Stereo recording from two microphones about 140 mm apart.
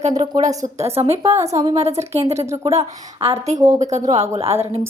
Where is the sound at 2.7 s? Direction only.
45° right (ahead or behind).